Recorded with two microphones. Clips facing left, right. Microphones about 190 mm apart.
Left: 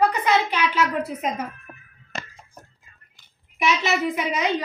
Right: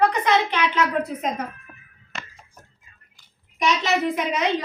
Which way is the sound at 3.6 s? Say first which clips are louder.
Right 1 dB; 5° left (ahead or behind).